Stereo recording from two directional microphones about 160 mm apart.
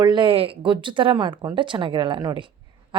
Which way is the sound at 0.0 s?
30° right (ahead or behind).